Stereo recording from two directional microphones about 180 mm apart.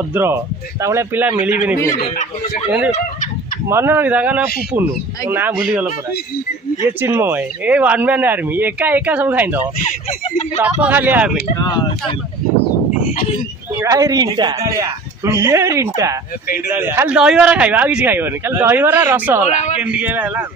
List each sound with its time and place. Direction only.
0.1 s speech: 15° right (ahead or behind)
1.8 s speech: 15° left (ahead or behind)
3.6 s speech: 15° right (ahead or behind)
7.0 s speech: 10° right (ahead or behind)
10.2 s speech: 35° left (ahead or behind)
10.6 s speech: 10° right (ahead or behind)
13.7 s a man's voice: 20° right (ahead or behind)